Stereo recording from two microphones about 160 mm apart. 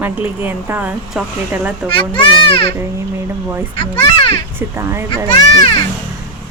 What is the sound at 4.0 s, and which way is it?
Speech, 35° left (ahead or behind).